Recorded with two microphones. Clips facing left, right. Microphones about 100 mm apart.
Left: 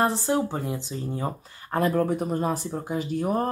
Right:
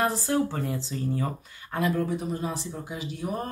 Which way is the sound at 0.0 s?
25° left (ahead or behind).